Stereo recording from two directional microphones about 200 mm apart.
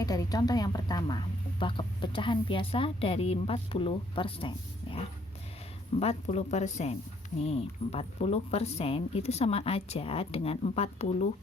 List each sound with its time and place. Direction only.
0.0 s a woman's voice: 20° left (ahead or behind)
6.0 s speech: 30° left (ahead or behind)